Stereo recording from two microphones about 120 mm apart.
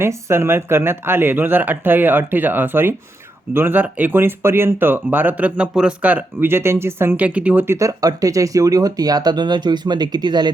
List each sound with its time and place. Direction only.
0.0 s speech: 20° right (ahead or behind); by 10.5 s 35° right (ahead or behind)